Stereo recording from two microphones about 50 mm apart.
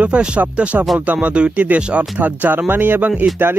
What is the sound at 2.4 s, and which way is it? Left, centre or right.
Speech, right.